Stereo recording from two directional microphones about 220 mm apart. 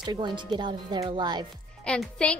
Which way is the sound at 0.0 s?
20° right (ahead or behind).